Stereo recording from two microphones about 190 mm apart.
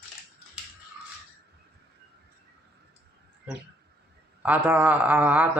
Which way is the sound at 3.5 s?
10° right (ahead or behind).